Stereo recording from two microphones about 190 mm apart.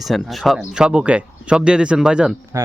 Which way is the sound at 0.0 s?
Centre (ahead or behind).